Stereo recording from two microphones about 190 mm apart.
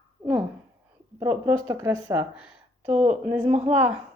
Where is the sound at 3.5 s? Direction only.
35° right (ahead or behind).